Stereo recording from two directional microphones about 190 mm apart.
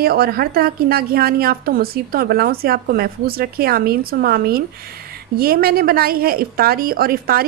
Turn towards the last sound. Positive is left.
turn(degrees=-50)  # may be behind; listen again after turning